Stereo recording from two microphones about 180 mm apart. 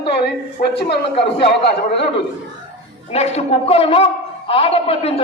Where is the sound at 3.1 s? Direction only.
35° left (ahead or behind).